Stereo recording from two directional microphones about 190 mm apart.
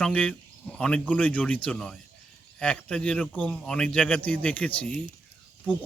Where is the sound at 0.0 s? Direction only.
5° left (ahead or behind).